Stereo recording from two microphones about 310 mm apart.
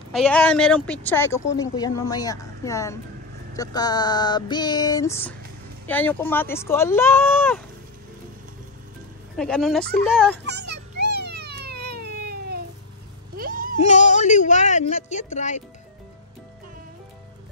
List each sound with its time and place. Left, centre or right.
0.1 s speech: centre
9.4 s speech: centre
10.4 s a sound: right
13.7 s a woman's voice: left